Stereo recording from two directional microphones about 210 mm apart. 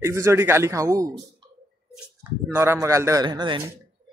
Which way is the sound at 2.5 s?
10° right (ahead or behind).